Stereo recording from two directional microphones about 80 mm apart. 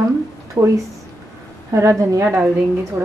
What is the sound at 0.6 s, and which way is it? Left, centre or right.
Speech, right.